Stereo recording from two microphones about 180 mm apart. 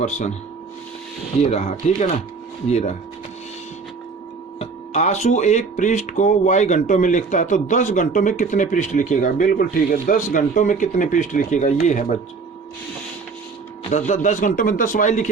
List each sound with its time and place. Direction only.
0.0 s speech: 40° left (ahead or behind)
1.4 s speech: 35° left (ahead or behind)
4.6 s speech: 35° left (ahead or behind)
13.9 s speech: 40° left (ahead or behind)